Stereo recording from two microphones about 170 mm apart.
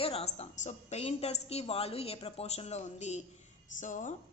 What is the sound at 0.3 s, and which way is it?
A woman's voice, 45° left (ahead or behind).